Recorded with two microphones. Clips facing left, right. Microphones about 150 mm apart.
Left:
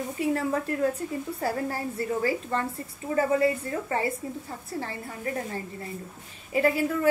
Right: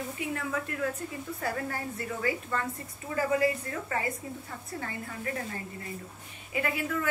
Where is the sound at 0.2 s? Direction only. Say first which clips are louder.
Left 9 dB; 35° left (ahead or behind).